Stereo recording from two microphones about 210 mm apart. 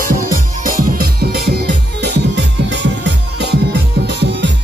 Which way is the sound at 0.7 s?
45° right (ahead or behind).